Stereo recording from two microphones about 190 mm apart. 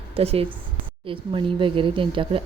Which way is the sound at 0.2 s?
30° right (ahead or behind).